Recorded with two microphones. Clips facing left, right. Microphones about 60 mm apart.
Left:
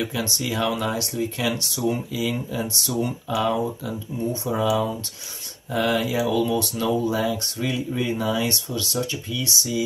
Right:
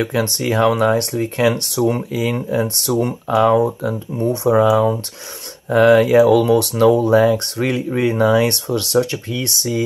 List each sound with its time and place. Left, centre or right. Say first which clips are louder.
0.0 s speech: right 7 dB; right
4.6 s speech: right 8 dB; right